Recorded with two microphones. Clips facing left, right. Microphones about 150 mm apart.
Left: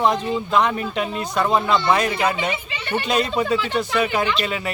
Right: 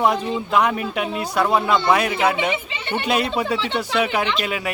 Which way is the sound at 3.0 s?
10° right (ahead or behind).